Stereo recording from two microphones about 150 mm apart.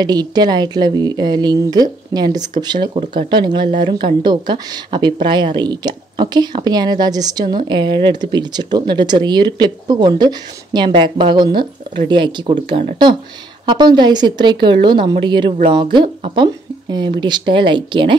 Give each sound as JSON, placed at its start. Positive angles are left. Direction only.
{"t": 0.0, "sound": "a woman's voice", "side_deg": -25}